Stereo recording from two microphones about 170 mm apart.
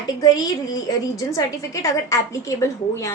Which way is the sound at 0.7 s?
20° left (ahead or behind).